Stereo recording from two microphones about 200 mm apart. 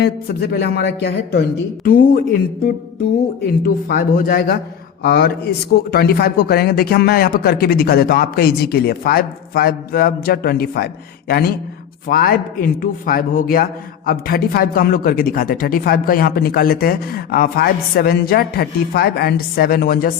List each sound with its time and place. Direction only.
0.0 s speech: 55° left (ahead or behind)
3.4 s speech: 50° left (ahead or behind)